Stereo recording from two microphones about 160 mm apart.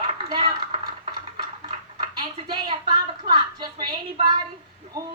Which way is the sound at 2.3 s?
30° right (ahead or behind).